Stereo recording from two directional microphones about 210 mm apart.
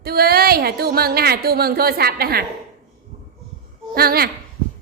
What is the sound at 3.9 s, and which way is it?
Speech, 45° right (ahead or behind).